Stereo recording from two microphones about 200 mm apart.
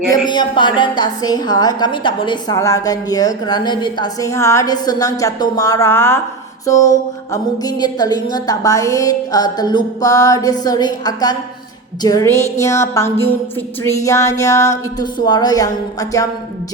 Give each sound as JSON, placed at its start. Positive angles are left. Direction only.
{"t": 0.1, "sound": "a woman's voice", "side_deg": 20}